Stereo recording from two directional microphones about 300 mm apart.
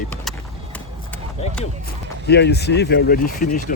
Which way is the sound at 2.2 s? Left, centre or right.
Left.